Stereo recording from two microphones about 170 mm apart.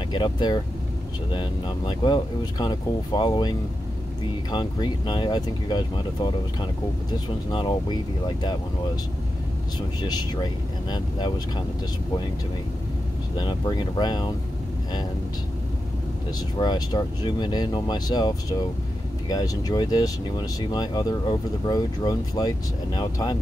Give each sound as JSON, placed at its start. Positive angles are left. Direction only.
{"t": 0.1, "sound": "speech", "side_deg": 25}
{"t": 10.0, "sound": "speech", "side_deg": 25}
{"t": 13.4, "sound": "speech", "side_deg": 25}
{"t": 16.5, "sound": "speech", "side_deg": 25}